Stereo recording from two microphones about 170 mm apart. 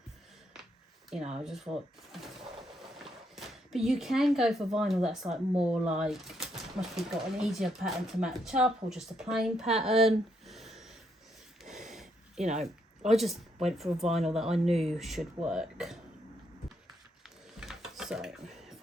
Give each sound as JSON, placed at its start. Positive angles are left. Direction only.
{"t": 1.1, "sound": "speech", "side_deg": -5}
{"t": 11.6, "sound": "snort", "side_deg": 0}
{"t": 12.4, "sound": "speech", "side_deg": -40}
{"t": 13.1, "sound": "speech", "side_deg": 0}
{"t": 14.7, "sound": "speech", "side_deg": -40}
{"t": 14.9, "sound": "speech", "side_deg": 0}
{"t": 17.2, "sound": "a sound", "side_deg": 0}